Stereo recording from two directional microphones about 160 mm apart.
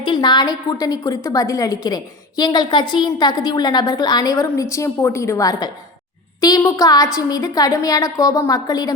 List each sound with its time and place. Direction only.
0.0 s a woman's voice: 30° left (ahead or behind)